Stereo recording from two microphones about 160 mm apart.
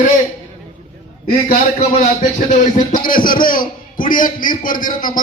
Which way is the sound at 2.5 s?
55° left (ahead or behind).